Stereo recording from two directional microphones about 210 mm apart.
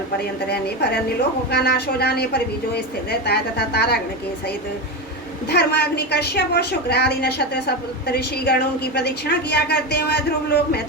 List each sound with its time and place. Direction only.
1.5 s a woman's voice: 50° left (ahead or behind)
5.5 s a woman's voice: 50° left (ahead or behind)